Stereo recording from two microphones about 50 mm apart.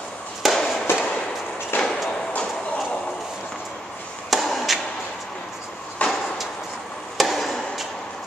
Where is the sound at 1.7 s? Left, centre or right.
Left.